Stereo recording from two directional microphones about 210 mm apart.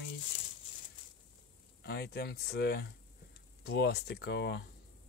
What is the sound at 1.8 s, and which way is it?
Speech, 50° left (ahead or behind).